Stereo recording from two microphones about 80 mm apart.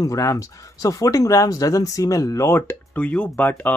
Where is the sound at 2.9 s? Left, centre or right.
Centre.